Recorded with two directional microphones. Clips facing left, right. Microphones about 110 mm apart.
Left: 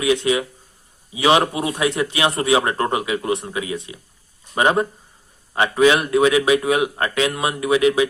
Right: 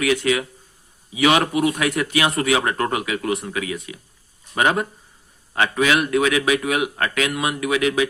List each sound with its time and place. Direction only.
0.0 s speech: 25° left (ahead or behind)